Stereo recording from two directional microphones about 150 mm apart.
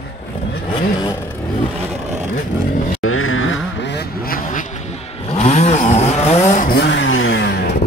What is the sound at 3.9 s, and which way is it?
Vehicle, 80° left.